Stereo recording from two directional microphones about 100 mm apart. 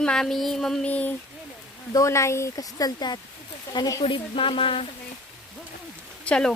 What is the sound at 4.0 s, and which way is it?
Speech, 65° left (ahead or behind).